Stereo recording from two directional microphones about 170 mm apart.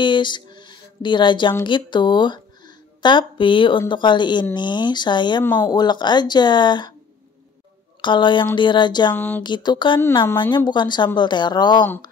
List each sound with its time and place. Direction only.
0.0 s speech: 25° left (ahead or behind)
5.4 s speech: 10° left (ahead or behind)
5.7 s speech: 25° left (ahead or behind)
8.0 s speech: 30° left (ahead or behind)
9.1 s speech: 10° left (ahead or behind)
9.4 s speech: 25° left (ahead or behind)
10.2 s speech: 15° left (ahead or behind)
10.5 s speech: 25° left (ahead or behind)